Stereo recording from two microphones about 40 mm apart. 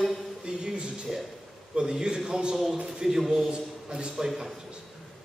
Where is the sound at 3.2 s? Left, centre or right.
Centre.